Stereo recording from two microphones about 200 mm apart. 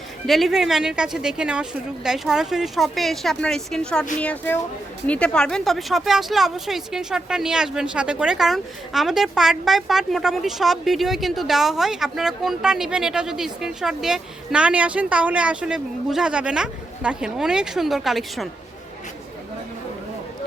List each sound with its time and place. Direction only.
0.3 s a woman's voice: centre (ahead or behind)